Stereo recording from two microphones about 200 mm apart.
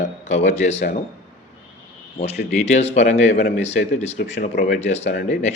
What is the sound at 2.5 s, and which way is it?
Speech, 35° left (ahead or behind).